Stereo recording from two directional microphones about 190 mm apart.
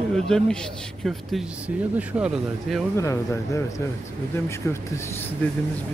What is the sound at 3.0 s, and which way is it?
Speech, 15° left (ahead or behind).